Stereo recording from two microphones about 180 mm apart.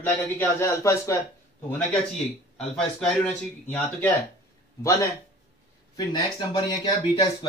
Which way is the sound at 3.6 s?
10° left (ahead or behind).